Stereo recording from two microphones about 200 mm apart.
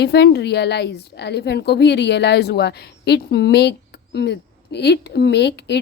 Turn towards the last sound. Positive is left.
turn(degrees=60)  # may be behind; listen again after turning